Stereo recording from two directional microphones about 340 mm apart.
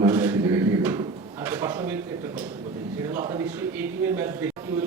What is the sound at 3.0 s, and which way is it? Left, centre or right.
A man's voice, centre.